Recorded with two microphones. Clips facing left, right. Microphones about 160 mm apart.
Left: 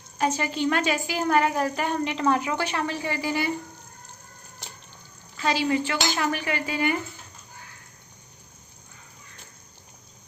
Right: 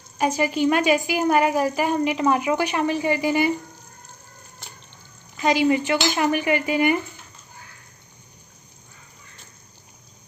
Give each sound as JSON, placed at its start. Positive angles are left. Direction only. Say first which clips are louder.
{"t": 0.2, "sound": "a woman's voice", "louder": "right 4 dB", "side_deg": -10}
{"t": 5.4, "sound": "a woman's voice", "louder": "right 5 dB", "side_deg": -15}